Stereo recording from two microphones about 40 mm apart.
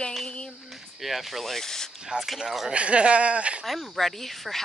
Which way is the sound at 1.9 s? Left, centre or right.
Centre.